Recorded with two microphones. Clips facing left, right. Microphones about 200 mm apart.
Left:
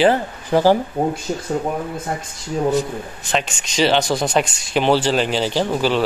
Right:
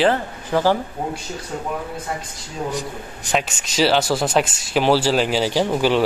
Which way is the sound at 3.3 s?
5° right (ahead or behind).